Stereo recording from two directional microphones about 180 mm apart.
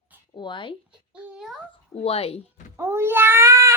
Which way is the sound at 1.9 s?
35° left (ahead or behind).